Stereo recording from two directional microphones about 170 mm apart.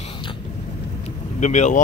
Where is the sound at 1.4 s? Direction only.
45° left (ahead or behind).